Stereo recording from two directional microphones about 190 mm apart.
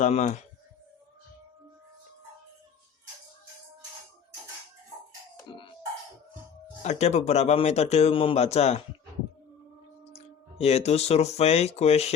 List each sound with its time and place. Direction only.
0.0 s a man's voice: 40° left (ahead or behind)
6.8 s a man's voice: 35° left (ahead or behind)
10.0 s speech: 35° left (ahead or behind)